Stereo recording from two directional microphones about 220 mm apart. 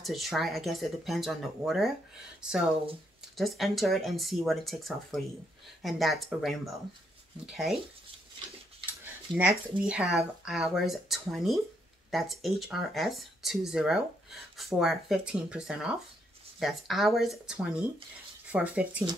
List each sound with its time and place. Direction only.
0.0 s speech: centre (ahead or behind)
9.8 s speech: 5° right (ahead or behind)